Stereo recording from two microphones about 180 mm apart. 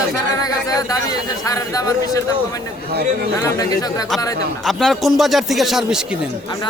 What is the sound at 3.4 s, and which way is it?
Speech, 20° left (ahead or behind).